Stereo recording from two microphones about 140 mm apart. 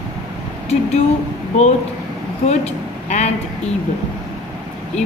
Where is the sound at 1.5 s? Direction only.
50° left (ahead or behind).